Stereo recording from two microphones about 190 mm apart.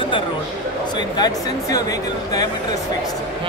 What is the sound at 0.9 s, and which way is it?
Speech, 20° left (ahead or behind).